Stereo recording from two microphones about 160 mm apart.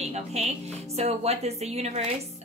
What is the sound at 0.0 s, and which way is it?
Speech, 40° right (ahead or behind).